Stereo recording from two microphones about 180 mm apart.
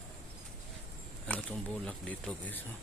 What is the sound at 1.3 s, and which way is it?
Speech, 5° left (ahead or behind).